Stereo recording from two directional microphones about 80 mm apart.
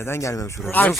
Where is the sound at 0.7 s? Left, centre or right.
Left.